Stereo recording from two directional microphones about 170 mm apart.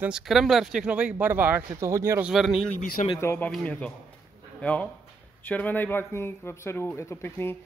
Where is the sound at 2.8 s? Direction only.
50° left (ahead or behind).